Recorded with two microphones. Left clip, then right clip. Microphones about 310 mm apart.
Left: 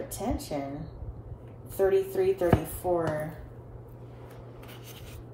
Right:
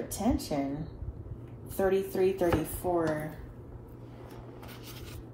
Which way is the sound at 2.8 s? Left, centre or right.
Right.